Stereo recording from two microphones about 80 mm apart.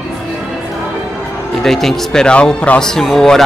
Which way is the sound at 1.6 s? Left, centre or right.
Centre.